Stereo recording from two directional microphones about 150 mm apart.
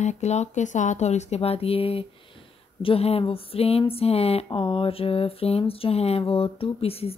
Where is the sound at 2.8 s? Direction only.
40° left (ahead or behind).